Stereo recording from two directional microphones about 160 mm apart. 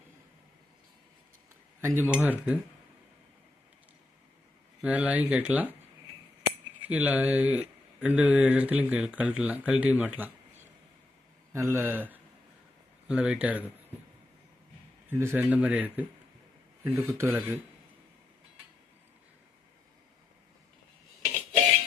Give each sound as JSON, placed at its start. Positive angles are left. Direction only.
{"t": 1.8, "sound": "speech", "side_deg": -10}
{"t": 4.8, "sound": "speech", "side_deg": -10}
{"t": 6.8, "sound": "speech", "side_deg": -10}
{"t": 11.5, "sound": "speech", "side_deg": -15}
{"t": 15.2, "sound": "speech", "side_deg": -10}